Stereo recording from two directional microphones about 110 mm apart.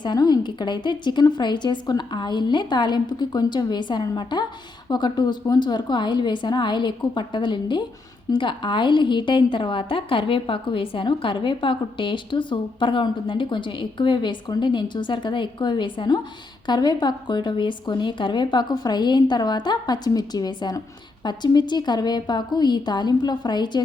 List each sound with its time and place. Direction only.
0.0 s a woman's voice: 40° left (ahead or behind)